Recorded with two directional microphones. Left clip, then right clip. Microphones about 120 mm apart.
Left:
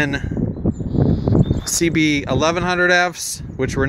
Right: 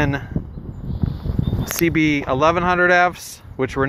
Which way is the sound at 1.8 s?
40° left (ahead or behind).